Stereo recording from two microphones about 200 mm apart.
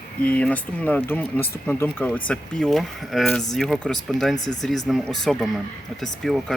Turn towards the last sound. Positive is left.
turn(degrees=0)  # may be behind; listen again after turning